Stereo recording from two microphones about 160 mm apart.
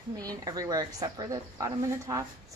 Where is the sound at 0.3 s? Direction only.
25° right (ahead or behind).